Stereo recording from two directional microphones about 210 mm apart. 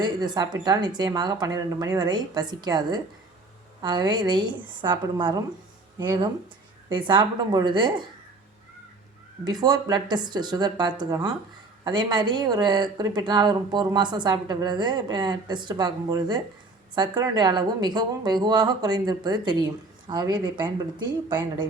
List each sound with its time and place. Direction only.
0.0 s a woman's voice: 20° right (ahead or behind)
9.4 s a woman's voice: 20° right (ahead or behind)